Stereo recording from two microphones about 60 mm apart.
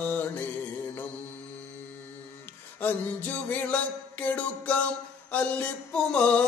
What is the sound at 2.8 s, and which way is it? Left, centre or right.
Mantra, left.